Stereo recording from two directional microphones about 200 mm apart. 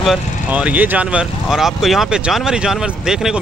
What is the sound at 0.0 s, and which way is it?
Speech, 5° right (ahead or behind).